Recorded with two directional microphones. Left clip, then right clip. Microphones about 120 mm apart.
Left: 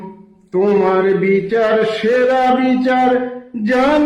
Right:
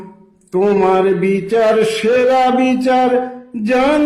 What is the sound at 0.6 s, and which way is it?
Mantra, 15° right (ahead or behind).